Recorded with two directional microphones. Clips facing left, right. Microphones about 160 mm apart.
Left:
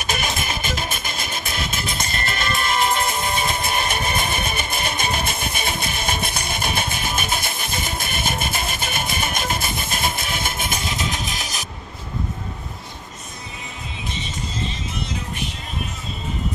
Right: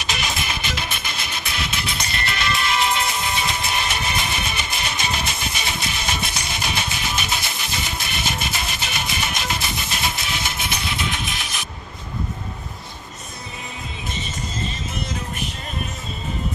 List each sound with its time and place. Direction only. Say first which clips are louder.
0.0 s music: left 2 dB; 50° left (ahead or behind)